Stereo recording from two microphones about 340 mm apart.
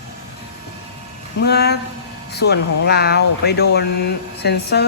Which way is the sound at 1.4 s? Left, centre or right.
Left.